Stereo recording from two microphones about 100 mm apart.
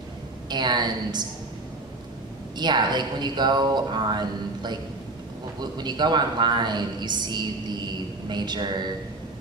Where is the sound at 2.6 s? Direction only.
45° right (ahead or behind).